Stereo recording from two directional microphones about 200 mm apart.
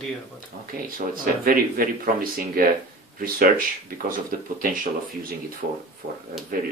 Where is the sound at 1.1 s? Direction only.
45° right (ahead or behind).